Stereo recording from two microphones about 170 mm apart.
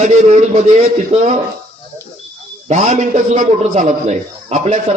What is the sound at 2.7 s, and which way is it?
A man's voice, 45° right (ahead or behind).